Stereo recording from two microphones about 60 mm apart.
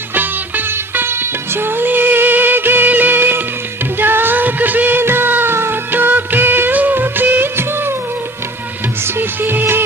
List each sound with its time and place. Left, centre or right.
0.1 s music: right
9.0 s music: right